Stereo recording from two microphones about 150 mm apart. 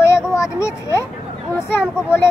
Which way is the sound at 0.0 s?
20° left (ahead or behind).